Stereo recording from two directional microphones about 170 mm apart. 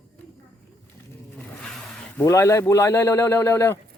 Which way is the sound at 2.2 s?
15° left (ahead or behind).